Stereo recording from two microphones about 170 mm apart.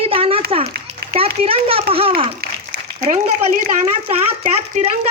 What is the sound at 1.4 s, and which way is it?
Speech, 35° right (ahead or behind).